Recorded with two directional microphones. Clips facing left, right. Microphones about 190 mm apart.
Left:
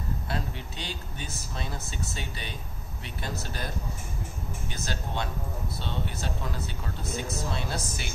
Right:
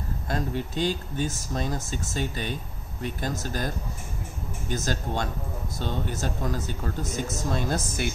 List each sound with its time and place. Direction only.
0.3 s speech: 45° right (ahead or behind)
4.6 s speech: 45° right (ahead or behind)